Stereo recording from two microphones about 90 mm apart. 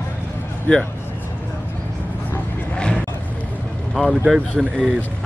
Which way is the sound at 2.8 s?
10° left (ahead or behind).